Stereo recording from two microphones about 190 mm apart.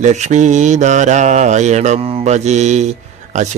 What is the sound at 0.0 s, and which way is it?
Speech, 40° right (ahead or behind).